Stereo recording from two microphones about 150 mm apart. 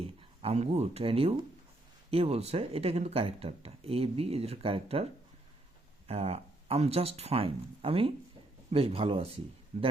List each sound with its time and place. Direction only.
0.2 s speech: 40° right (ahead or behind)
6.1 s speech: 45° right (ahead or behind)